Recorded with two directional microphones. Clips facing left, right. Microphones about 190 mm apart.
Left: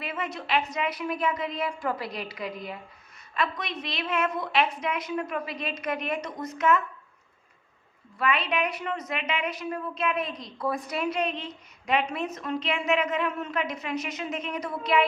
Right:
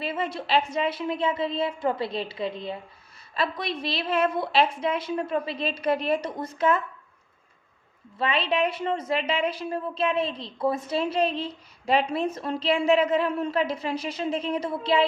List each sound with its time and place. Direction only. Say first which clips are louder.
0.0 s a woman's voice: right 4 dB; 30° right (ahead or behind)
8.2 s a woman's voice: right 2 dB; 30° right (ahead or behind)